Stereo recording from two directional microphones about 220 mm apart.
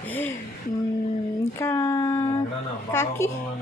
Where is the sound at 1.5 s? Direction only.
10° left (ahead or behind).